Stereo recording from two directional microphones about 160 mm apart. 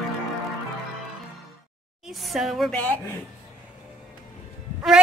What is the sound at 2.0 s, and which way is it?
Speech, centre (ahead or behind).